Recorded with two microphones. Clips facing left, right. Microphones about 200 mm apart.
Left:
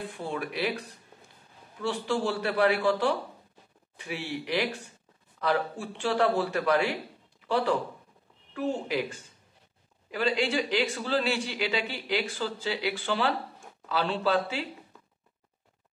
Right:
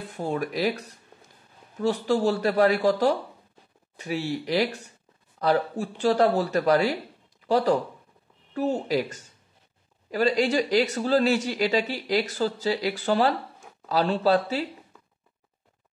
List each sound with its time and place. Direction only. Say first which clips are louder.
0.1 s speech: right 5 dB; 40° right (ahead or behind)